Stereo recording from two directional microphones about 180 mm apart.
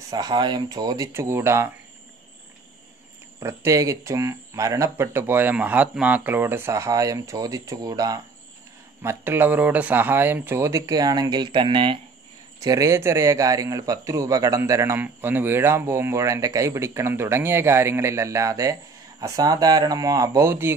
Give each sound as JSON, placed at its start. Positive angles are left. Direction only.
{"t": 0.1, "sound": "speech", "side_deg": -25}
{"t": 3.3, "sound": "a man's voice", "side_deg": -15}